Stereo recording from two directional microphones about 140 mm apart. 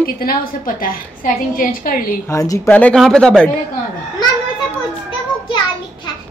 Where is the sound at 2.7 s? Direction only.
10° left (ahead or behind).